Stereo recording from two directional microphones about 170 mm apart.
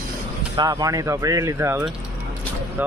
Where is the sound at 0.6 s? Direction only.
20° right (ahead or behind).